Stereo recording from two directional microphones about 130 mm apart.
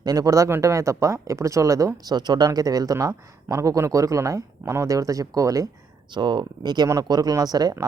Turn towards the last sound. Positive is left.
turn(degrees=-30)  # may be behind; listen again after turning